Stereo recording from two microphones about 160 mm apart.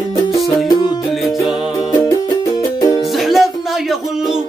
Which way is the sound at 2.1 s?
25° left (ahead or behind).